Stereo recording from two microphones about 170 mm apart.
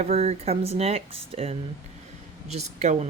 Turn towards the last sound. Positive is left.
turn(degrees=-40)  # may be behind; listen again after turning